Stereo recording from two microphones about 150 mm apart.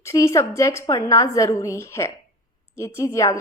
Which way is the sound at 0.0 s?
20° left (ahead or behind).